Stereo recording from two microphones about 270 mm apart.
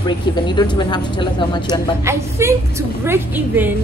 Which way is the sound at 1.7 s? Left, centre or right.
Centre.